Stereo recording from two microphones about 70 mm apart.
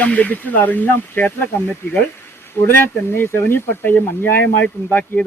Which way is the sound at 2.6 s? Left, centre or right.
Left.